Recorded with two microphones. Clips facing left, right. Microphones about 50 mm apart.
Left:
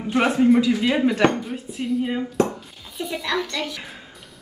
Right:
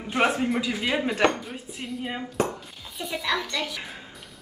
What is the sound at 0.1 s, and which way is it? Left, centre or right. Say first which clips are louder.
Dishes: left 2 dB; centre.